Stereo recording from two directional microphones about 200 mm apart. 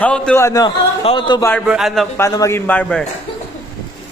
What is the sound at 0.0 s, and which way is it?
A man's voice, 5° left (ahead or behind).